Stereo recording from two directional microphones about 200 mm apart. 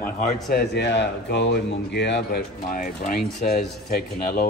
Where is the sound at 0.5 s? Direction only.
55° left (ahead or behind).